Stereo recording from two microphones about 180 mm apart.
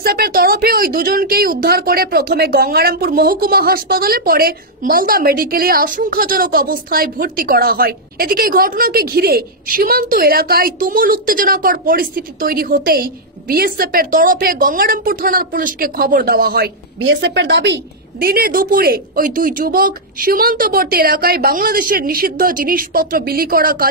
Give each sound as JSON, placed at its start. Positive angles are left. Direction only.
{"t": 0.0, "sound": "speech", "side_deg": -60}